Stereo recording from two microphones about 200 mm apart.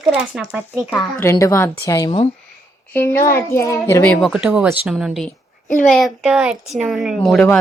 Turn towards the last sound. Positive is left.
turn(degrees=5)  # may be behind; listen again after turning